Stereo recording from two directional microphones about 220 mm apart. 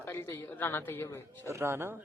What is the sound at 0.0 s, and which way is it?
A woman's voice, 10° left (ahead or behind).